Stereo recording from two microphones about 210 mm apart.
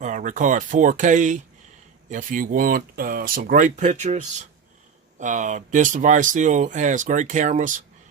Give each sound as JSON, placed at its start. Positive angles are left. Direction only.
{"t": 0.0, "sound": "speech", "side_deg": -35}